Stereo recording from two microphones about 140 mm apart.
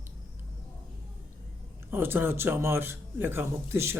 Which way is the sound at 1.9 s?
15° right (ahead or behind).